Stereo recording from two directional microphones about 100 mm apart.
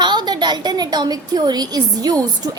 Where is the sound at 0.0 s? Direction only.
45° right (ahead or behind).